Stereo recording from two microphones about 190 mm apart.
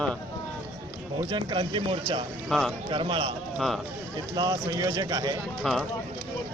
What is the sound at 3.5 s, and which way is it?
Speech, centre (ahead or behind).